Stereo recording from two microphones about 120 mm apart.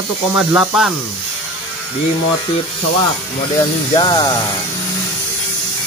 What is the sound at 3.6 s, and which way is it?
Speech, 35° left (ahead or behind).